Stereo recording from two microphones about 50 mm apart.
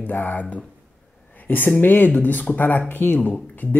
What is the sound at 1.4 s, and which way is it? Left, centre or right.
Speech, left.